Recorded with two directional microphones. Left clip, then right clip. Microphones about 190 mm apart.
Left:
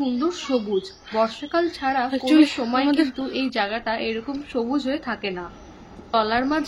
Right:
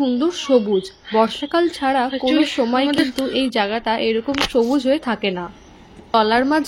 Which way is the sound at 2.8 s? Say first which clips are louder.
Right 2 dB; 5° left (ahead or behind).